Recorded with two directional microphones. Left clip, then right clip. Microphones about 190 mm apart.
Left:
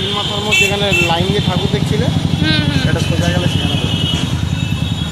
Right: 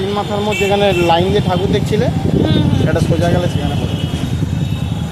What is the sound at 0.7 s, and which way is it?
Speech, 55° right (ahead or behind).